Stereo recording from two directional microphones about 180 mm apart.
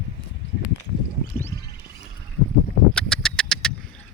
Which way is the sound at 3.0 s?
5° left (ahead or behind).